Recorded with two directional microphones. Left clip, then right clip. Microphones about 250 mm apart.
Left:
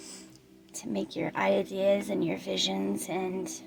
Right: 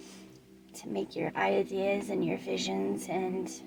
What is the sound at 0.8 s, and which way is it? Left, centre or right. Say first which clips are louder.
Speech: left 1 dB; left.